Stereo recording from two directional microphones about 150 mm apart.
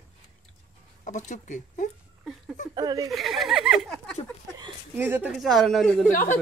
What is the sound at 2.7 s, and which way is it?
Speech, 25° right (ahead or behind).